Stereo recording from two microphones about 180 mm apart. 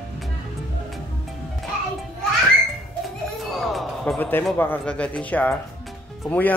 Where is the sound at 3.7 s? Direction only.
5° left (ahead or behind).